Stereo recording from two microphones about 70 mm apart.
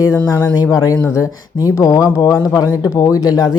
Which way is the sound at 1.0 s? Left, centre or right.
Left.